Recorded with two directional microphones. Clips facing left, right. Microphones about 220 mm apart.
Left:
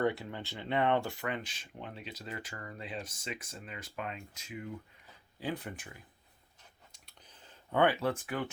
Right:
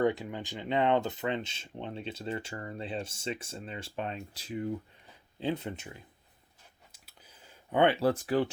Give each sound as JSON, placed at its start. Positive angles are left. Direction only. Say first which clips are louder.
{"t": 0.0, "sound": "speech", "louder": "right 4 dB", "side_deg": -15}
{"t": 6.9, "sound": "clicking", "louder": "right 1 dB", "side_deg": -5}
{"t": 7.8, "sound": "speech", "louder": "right 3 dB", "side_deg": -30}